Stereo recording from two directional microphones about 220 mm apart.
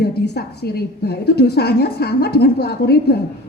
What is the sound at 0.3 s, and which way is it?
A woman's voice, 45° left (ahead or behind).